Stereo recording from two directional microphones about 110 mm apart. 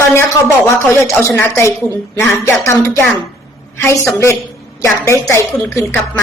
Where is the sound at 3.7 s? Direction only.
25° left (ahead or behind).